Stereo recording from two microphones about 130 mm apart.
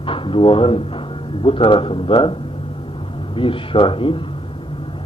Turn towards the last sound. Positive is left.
turn(degrees=40)  # may be behind; listen again after turning